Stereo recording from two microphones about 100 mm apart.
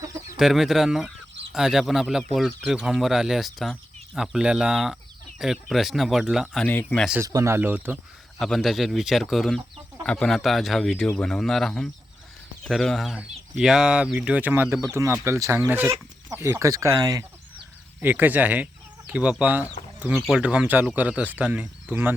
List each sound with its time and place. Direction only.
0.3 s speech: 5° right (ahead or behind)
6.6 s speech: 15° left (ahead or behind)
7.2 s speech: 30° right (ahead or behind)
8.4 s speech: centre (ahead or behind); by 17.2 s 35° right (ahead or behind)
18.0 s speech: 20° right (ahead or behind)